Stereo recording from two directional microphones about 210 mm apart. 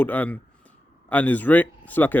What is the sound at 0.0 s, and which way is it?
Speech, 10° left (ahead or behind).